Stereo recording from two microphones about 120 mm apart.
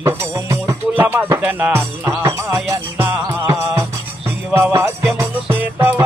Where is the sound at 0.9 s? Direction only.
15° right (ahead or behind).